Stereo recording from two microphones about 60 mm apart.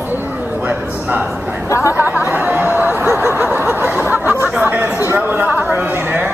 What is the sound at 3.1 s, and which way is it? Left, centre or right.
Snicker, right.